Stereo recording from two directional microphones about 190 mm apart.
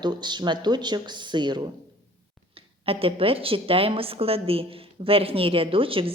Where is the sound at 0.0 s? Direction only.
25° right (ahead or behind).